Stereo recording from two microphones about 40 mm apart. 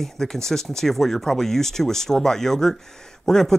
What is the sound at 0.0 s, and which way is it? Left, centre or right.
Speech, centre.